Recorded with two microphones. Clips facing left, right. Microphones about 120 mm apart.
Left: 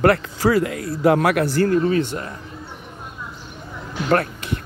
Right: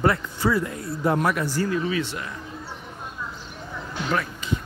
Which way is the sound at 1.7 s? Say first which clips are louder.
Left 7 dB; 45° left (ahead or behind).